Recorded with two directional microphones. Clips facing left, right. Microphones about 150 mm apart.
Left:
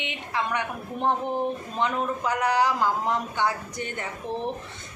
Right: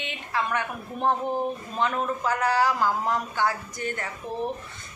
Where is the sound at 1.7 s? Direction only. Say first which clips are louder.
Right 1 dB; 20° left (ahead or behind).